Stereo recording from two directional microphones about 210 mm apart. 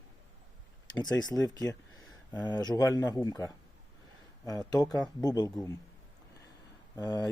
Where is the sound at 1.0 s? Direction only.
20° left (ahead or behind).